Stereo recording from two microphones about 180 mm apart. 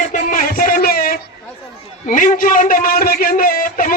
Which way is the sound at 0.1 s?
45° left (ahead or behind).